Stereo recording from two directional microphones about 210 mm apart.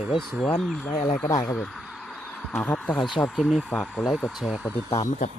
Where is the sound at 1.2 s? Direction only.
15° left (ahead or behind); by 4.7 s centre (ahead or behind).